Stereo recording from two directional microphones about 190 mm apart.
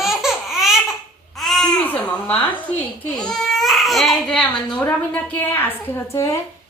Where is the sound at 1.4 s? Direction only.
Centre (ahead or behind).